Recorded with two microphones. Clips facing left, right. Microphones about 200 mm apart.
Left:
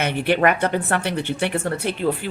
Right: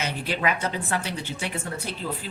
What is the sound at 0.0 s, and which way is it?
Speech, 65° left (ahead or behind).